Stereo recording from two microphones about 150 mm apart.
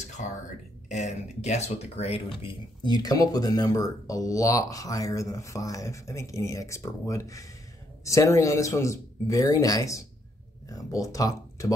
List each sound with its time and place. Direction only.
0.0 s a sound: 50° left (ahead or behind)
0.8 s speech: 50° left (ahead or behind)
2.4 s speech: 30° left (ahead or behind)